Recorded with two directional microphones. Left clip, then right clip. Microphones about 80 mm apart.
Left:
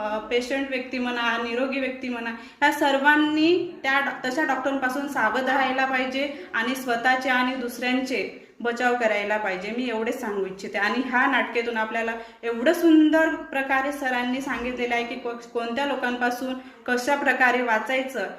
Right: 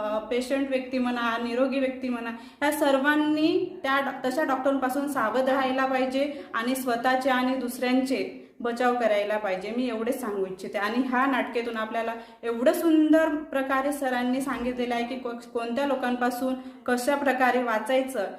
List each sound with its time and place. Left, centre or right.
0.0 s a woman's voice: right